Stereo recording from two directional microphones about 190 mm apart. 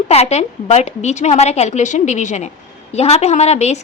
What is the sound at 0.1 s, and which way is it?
A woman's voice, 35° left (ahead or behind).